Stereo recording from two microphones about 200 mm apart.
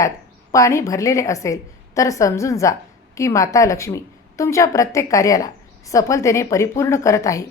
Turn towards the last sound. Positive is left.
turn(degrees=15)  # may be behind; listen again after turning